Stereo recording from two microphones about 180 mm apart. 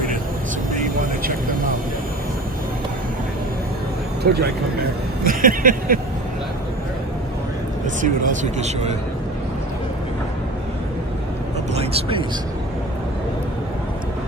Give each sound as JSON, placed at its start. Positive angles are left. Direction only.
{"t": 0.7, "sound": "vehicle", "side_deg": -50}
{"t": 4.2, "sound": "speech", "side_deg": -60}
{"t": 7.9, "sound": "speech", "side_deg": -45}
{"t": 11.8, "sound": "speech", "side_deg": -30}